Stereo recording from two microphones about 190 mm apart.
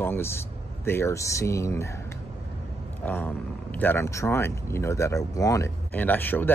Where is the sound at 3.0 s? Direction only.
10° left (ahead or behind).